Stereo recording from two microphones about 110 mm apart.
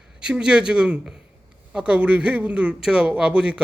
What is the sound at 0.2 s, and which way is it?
A man's voice, 10° right (ahead or behind).